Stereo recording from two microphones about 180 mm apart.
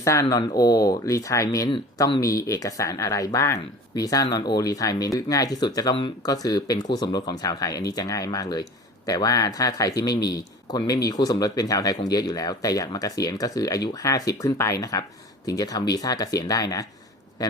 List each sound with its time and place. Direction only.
0.0 s speech: 15° left (ahead or behind)